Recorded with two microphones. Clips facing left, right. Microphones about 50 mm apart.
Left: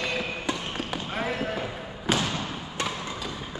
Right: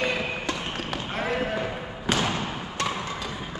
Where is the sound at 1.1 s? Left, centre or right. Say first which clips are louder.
Right 2 dB; centre.